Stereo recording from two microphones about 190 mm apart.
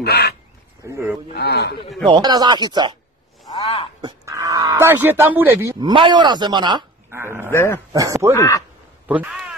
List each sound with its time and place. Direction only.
0.0 s a man's voice: 60° left (ahead or behind)
0.8 s speech: 15° right (ahead or behind)
1.3 s a man's voice: 55° left (ahead or behind)
2.0 s speech: 25° right (ahead or behind)
3.4 s speech: 25° left (ahead or behind)
4.0 s speech: 15° right (ahead or behind)
7.1 s speech: 10° right (ahead or behind)
7.5 s speech: 10° left (ahead or behind)
7.9 s speech: 15° right (ahead or behind)
8.4 s speech: 15° left (ahead or behind)
9.0 s speech: 10° right (ahead or behind)